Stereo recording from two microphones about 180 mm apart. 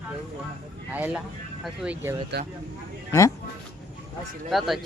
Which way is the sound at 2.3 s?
70° right (ahead or behind).